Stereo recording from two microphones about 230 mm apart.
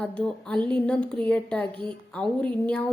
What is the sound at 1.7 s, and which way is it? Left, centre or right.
Speech, right.